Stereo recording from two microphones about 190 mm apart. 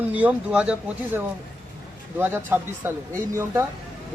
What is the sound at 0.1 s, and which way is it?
Speech, 5° right (ahead or behind).